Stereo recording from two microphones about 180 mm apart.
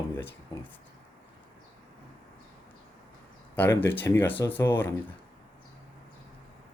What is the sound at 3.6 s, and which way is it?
Speech, 10° left (ahead or behind).